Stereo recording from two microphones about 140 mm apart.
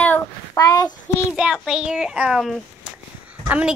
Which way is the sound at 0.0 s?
10° left (ahead or behind).